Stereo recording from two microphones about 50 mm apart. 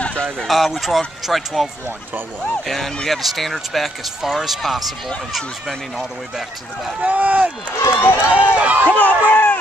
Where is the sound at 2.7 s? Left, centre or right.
Centre.